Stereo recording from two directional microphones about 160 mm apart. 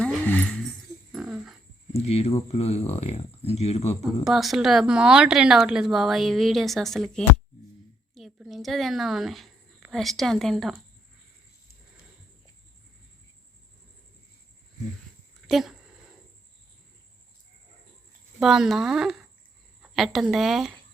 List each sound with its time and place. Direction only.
0.0 s a sound: 10° left (ahead or behind)
1.1 s a sound: centre (ahead or behind)
2.0 s speech: 40° left (ahead or behind)
4.0 s a woman's voice: centre (ahead or behind)
15.4 s speech: centre (ahead or behind)
18.3 s a woman's voice: centre (ahead or behind)